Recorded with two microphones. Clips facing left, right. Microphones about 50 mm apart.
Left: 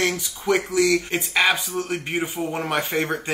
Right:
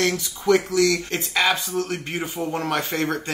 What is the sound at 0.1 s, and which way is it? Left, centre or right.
Speech, centre.